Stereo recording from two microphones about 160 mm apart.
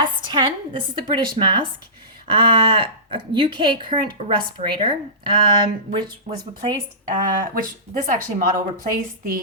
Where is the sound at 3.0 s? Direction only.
35° right (ahead or behind).